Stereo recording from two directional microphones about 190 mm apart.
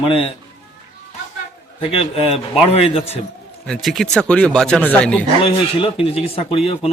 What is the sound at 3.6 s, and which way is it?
Speech, centre (ahead or behind).